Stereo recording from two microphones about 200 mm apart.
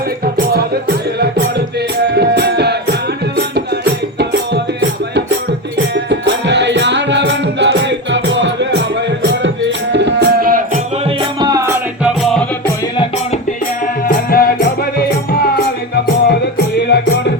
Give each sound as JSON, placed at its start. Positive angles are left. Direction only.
{"t": 0.3, "sound": "music", "side_deg": -50}
{"t": 2.1, "sound": "music", "side_deg": -55}
{"t": 4.2, "sound": "music", "side_deg": -60}
{"t": 9.9, "sound": "music", "side_deg": -60}
{"t": 11.0, "sound": "music", "side_deg": -25}
{"t": 12.2, "sound": "music", "side_deg": 0}
{"t": 13.8, "sound": "music", "side_deg": 45}